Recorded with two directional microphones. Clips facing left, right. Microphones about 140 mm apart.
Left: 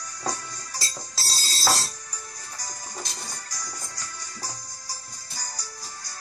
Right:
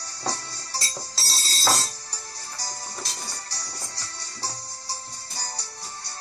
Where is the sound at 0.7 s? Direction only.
30° right (ahead or behind).